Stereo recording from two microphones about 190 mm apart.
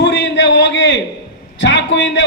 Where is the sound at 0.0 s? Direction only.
65° left (ahead or behind).